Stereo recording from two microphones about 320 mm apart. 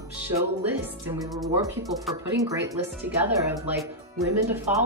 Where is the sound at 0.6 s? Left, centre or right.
Centre.